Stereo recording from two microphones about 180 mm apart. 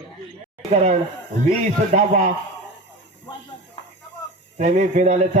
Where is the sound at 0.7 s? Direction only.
40° right (ahead or behind).